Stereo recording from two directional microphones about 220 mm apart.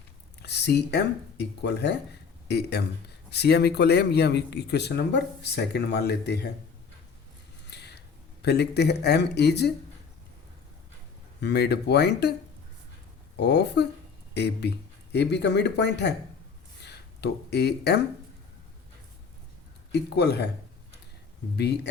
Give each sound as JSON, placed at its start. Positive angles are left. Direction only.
{"t": 0.4, "sound": "speech", "side_deg": 50}
{"t": 7.7, "sound": "a sound", "side_deg": 50}
{"t": 8.4, "sound": "speech", "side_deg": 50}
{"t": 11.4, "sound": "speech", "side_deg": 50}
{"t": 13.3, "sound": "speech", "side_deg": 50}
{"t": 19.9, "sound": "speech", "side_deg": 50}
{"t": 21.5, "sound": "speech", "side_deg": 50}